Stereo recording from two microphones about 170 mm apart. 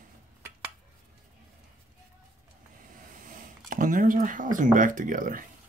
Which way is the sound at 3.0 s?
50° right (ahead or behind).